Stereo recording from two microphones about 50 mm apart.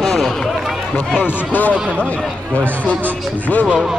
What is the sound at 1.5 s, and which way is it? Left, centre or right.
Speech, left.